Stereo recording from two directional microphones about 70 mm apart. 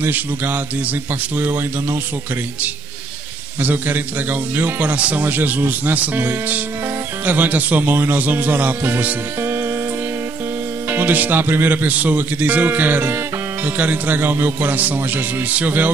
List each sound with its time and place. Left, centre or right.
0.0 s a man's voice: right
3.6 s a man's voice: right
10.9 s a man's voice: right